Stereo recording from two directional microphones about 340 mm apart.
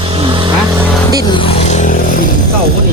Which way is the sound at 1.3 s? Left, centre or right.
Centre.